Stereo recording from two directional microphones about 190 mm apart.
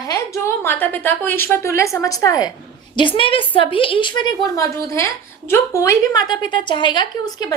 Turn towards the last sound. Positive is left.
turn(degrees=20)  # may be behind; listen again after turning